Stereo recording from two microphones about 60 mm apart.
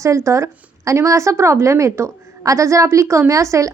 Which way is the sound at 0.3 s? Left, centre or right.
Right.